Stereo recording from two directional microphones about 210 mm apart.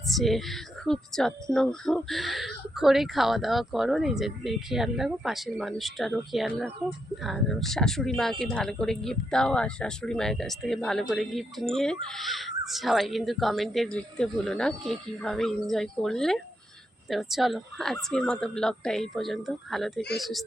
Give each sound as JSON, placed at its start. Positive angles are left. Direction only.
{"t": 0.2, "sound": "speech", "side_deg": 0}